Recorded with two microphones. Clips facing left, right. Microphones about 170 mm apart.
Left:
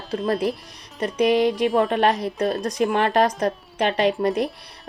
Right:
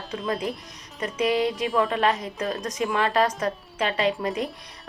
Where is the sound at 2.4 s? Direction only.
35° left (ahead or behind).